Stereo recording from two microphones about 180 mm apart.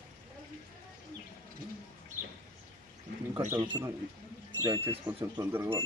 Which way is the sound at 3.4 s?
15° right (ahead or behind).